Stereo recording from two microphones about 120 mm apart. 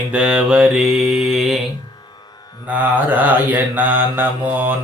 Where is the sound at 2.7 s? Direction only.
15° right (ahead or behind).